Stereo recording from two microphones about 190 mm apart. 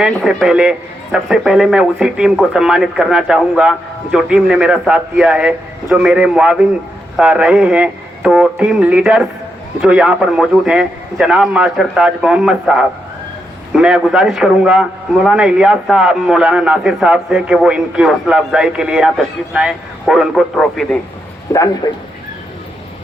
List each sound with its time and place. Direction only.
0.0 s a man's voice: centre (ahead or behind)
21.5 s a man's voice: 15° left (ahead or behind)